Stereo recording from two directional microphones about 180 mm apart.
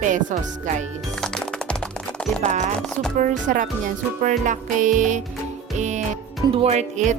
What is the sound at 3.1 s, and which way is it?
Speech, 45° right (ahead or behind).